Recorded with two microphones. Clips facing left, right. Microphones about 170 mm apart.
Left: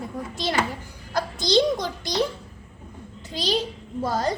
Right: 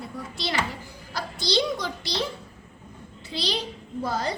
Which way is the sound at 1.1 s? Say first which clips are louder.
Left 5 dB; 45° left (ahead or behind).